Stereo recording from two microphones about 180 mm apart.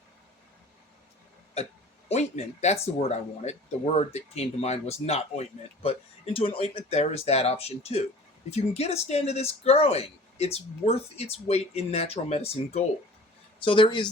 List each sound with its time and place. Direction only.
2.0 s speech: 40° left (ahead or behind)